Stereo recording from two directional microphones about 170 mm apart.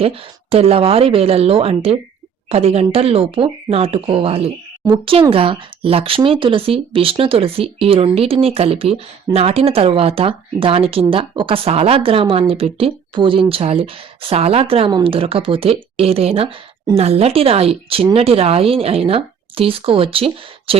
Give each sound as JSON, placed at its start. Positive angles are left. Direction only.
{"t": 0.0, "sound": "speech", "side_deg": -35}